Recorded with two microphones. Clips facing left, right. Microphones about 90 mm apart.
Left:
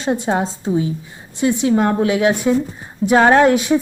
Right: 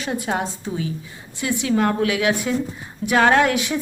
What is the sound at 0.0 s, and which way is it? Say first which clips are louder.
Speech: left 5 dB; 25° left (ahead or behind).